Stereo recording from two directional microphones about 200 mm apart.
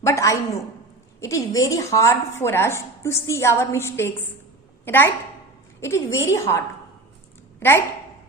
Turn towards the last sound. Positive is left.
turn(degrees=10)  # may be behind; listen again after turning